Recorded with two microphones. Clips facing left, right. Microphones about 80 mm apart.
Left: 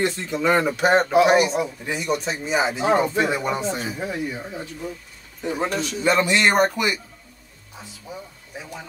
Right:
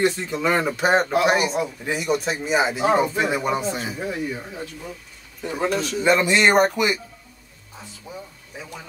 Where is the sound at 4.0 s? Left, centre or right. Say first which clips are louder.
Even; centre.